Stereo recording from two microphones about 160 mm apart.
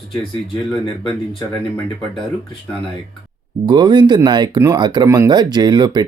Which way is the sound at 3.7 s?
30° right (ahead or behind).